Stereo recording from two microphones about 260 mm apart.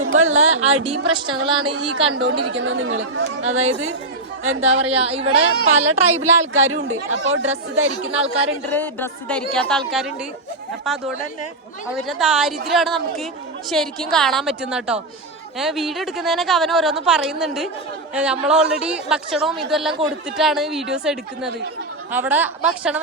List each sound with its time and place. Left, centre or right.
0.0 s speech: right
0.7 s a woman's voice: right
2.4 s speech: right
3.6 s a woman's voice: right
5.2 s speech: right
5.9 s a woman's voice: right
6.5 s speech: right
8.7 s a woman's voice: centre